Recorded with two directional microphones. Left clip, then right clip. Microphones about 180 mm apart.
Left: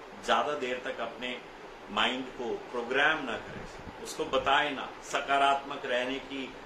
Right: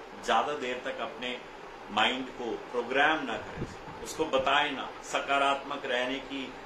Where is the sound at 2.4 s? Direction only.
15° left (ahead or behind).